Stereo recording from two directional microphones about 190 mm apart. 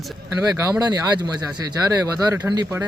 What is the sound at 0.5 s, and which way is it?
Speech, 15° right (ahead or behind).